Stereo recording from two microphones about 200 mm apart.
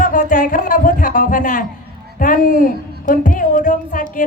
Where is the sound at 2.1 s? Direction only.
40° left (ahead or behind).